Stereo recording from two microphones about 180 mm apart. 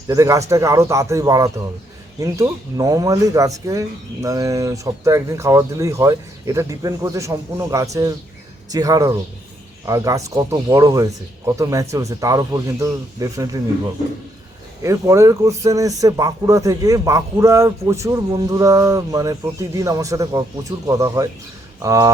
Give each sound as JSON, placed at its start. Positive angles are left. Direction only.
{"t": 0.1, "sound": "speech", "side_deg": -15}